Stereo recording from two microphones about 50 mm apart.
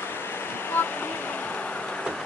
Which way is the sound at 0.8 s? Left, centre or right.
Left.